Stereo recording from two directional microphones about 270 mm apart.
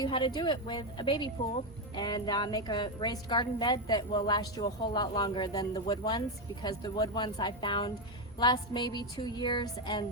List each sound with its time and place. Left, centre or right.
0.0 s a woman's voice: centre